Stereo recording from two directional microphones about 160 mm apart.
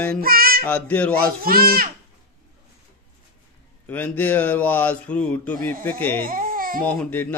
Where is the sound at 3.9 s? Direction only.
10° left (ahead or behind).